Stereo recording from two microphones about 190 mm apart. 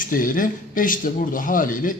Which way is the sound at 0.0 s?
45° left (ahead or behind).